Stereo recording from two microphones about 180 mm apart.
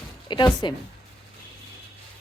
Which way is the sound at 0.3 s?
25° left (ahead or behind).